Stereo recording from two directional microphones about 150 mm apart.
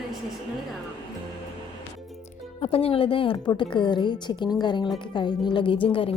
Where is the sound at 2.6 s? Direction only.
40° left (ahead or behind).